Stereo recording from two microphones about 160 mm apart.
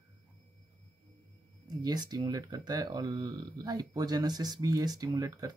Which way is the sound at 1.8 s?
25° right (ahead or behind).